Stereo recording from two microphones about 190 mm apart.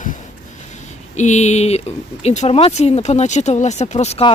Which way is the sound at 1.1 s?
40° left (ahead or behind).